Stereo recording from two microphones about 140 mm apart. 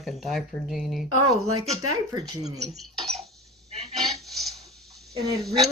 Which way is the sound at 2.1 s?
30° right (ahead or behind).